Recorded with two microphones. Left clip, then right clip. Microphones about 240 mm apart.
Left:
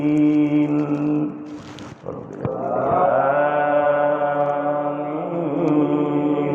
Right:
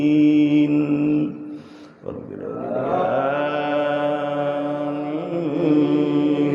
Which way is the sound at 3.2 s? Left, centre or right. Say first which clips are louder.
Left 4 dB; right.